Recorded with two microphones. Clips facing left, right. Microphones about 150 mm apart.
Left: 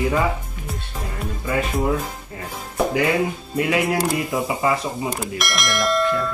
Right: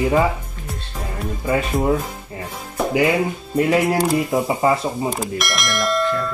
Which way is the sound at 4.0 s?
Centre (ahead or behind).